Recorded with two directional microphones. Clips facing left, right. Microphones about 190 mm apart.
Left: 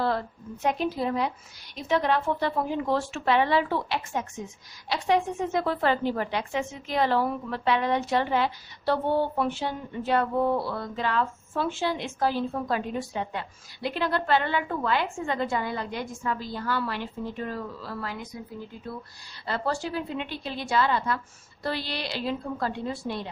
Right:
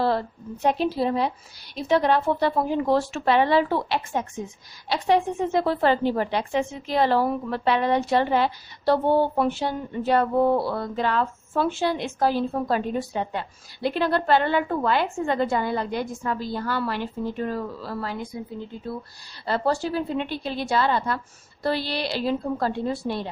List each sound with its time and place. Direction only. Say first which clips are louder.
0.0 s a woman's voice: right 4 dB; 30° right (ahead or behind)